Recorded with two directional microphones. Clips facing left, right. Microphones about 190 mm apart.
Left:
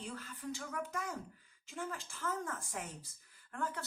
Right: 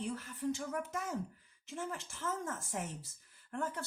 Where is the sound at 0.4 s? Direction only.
25° right (ahead or behind).